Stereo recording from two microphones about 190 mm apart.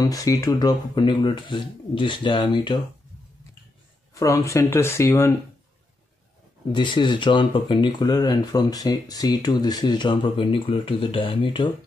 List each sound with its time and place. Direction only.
0.0 s speech: 20° left (ahead or behind)
4.1 s speech: 15° left (ahead or behind)
6.7 s speech: 25° left (ahead or behind)